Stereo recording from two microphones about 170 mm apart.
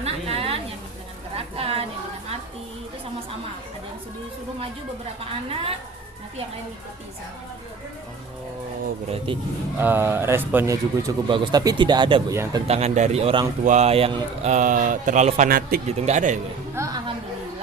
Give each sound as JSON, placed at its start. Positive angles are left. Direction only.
{"t": 0.0, "sound": "a sound", "side_deg": -35}
{"t": 9.0, "sound": "a man's voice", "side_deg": -35}
{"t": 9.7, "sound": "speech", "side_deg": -10}
{"t": 12.3, "sound": "speech", "side_deg": -15}
{"t": 12.6, "sound": "a man's voice", "side_deg": -40}
{"t": 15.4, "sound": "a man's voice", "side_deg": -60}
{"t": 15.9, "sound": "speech", "side_deg": -40}
{"t": 16.7, "sound": "music", "side_deg": -20}